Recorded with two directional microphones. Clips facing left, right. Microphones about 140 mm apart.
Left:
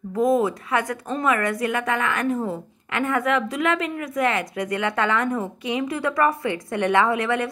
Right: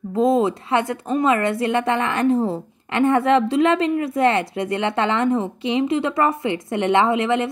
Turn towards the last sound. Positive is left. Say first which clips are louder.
# right 3 dB
turn(degrees=-25)  # may be behind; listen again after turning